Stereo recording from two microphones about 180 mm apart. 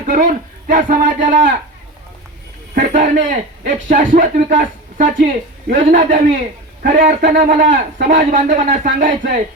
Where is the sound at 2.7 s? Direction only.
45° right (ahead or behind).